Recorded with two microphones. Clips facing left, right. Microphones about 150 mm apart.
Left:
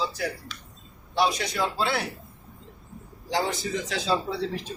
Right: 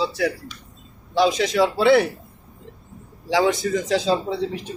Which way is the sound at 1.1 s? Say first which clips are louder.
Right 7 dB; 90° right.